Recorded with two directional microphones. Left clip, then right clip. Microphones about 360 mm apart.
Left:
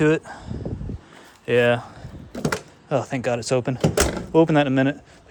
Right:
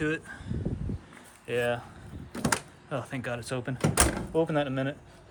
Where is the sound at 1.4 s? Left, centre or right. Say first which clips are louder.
Left 11 dB; centre.